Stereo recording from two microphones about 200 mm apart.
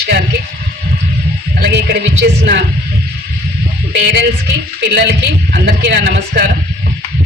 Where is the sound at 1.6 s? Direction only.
55° right (ahead or behind).